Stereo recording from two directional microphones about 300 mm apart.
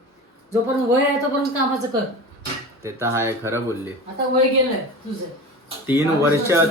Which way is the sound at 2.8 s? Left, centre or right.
Centre.